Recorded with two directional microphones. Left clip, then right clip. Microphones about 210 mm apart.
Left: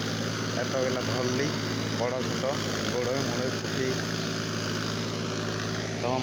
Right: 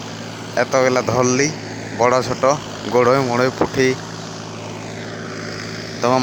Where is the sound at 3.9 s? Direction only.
50° left (ahead or behind).